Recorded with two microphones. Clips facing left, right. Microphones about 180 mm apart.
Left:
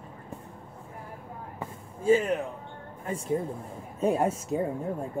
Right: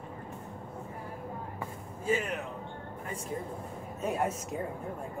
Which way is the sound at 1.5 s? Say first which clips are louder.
Left 1 dB; 30° left (ahead or behind).